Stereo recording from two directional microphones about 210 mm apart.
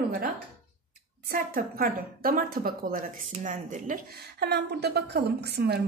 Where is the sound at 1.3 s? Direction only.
45° right (ahead or behind).